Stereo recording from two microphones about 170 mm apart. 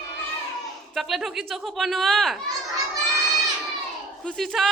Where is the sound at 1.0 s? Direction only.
Centre (ahead or behind).